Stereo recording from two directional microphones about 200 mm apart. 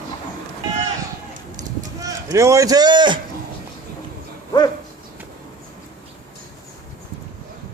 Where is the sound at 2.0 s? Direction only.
15° right (ahead or behind).